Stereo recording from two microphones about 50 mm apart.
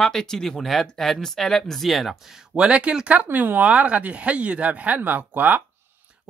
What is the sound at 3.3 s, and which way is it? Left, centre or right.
Speech, right.